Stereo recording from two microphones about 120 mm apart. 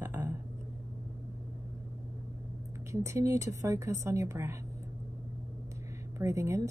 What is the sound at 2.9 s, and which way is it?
Speech, 25° right (ahead or behind).